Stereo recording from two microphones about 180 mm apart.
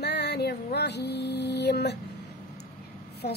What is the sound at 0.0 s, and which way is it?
Music, 65° left (ahead or behind).